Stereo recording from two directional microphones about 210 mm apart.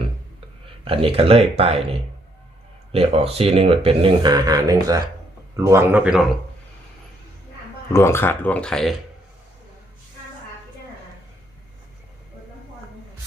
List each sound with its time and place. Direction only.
0.9 s speech: 25° right (ahead or behind); by 6.2 s 5° right (ahead or behind)
7.9 s speech: 10° left (ahead or behind)